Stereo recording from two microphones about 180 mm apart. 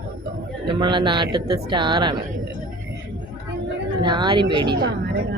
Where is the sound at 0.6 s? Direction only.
25° right (ahead or behind).